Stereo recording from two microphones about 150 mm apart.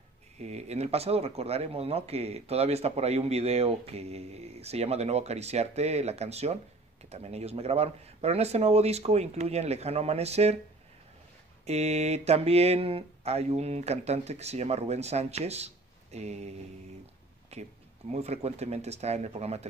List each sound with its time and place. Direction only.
0.4 s speech: 45° right (ahead or behind)
11.6 s speech: 45° right (ahead or behind)
17.0 s a sound: 45° right (ahead or behind)
18.1 s speech: 45° right (ahead or behind)